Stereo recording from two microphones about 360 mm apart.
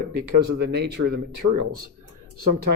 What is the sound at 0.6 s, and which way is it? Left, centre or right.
Speech, right.